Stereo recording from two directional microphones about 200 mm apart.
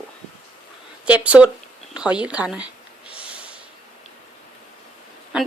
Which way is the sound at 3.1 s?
5° right (ahead or behind).